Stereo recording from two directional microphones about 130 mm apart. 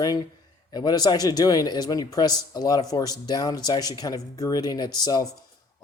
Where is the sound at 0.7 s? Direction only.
30° left (ahead or behind).